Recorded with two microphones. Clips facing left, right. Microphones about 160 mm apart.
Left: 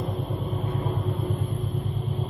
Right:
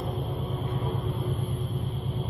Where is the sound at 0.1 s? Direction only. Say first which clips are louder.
Left 2 dB; centre (ahead or behind).